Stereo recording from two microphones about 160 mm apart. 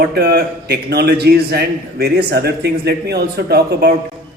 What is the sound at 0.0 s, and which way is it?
A man's voice, 85° right.